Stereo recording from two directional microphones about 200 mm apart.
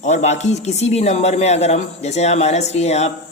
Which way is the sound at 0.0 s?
35° left (ahead or behind).